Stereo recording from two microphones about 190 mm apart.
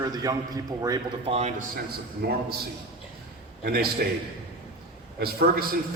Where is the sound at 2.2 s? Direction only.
55° right (ahead or behind).